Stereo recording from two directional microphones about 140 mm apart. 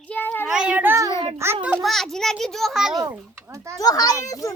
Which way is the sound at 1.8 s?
Centre (ahead or behind).